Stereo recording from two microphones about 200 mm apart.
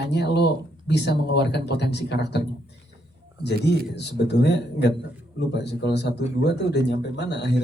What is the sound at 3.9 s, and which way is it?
Speech, 55° left (ahead or behind).